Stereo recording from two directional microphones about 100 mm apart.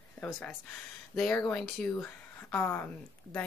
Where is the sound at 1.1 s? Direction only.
5° left (ahead or behind).